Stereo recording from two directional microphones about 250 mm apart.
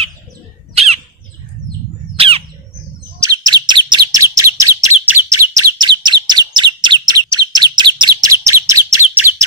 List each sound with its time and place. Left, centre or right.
0.7 s squawk: right
2.1 s squawk: right
3.2 s bird: centre